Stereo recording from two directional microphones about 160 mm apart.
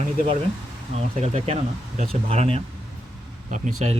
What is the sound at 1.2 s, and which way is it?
Speech, 40° right (ahead or behind).